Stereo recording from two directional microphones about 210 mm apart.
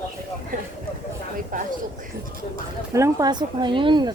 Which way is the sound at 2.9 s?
15° right (ahead or behind).